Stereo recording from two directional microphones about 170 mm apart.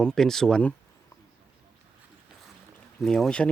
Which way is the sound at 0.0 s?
5° left (ahead or behind).